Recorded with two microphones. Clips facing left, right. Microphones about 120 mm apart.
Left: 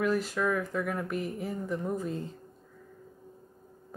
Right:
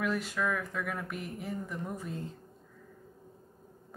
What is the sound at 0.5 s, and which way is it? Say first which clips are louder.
Speech: left 4 dB; 35° left (ahead or behind).